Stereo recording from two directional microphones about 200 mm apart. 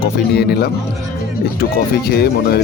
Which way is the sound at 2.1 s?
50° left (ahead or behind).